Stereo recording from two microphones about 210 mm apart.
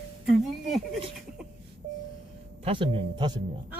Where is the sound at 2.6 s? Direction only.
25° right (ahead or behind).